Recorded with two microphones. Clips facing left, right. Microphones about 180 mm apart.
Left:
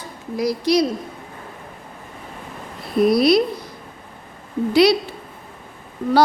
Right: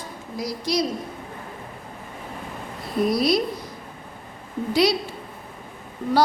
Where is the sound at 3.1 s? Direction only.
65° left (ahead or behind).